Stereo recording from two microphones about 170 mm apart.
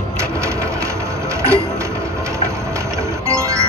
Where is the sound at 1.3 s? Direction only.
15° right (ahead or behind).